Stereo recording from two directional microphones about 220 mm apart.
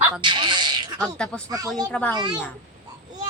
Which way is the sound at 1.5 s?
15° right (ahead or behind).